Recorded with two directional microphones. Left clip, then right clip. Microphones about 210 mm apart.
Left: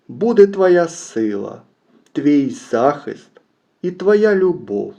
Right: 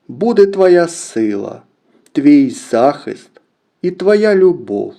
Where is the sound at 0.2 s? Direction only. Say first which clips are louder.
Right 2 dB; 35° right (ahead or behind).